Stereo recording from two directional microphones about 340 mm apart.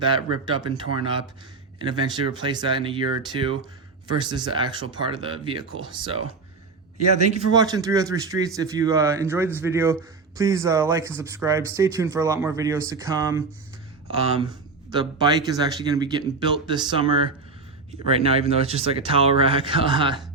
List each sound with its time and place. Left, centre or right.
0.0 s speech: centre
7.3 s speech: centre